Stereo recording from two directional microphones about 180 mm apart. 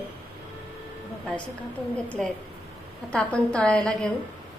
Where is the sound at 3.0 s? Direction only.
5° left (ahead or behind).